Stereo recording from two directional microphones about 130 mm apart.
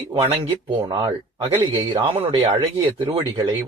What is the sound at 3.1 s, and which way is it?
Speech, 35° right (ahead or behind).